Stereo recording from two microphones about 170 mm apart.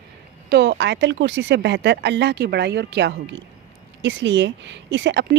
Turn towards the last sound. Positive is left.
turn(degrees=-90)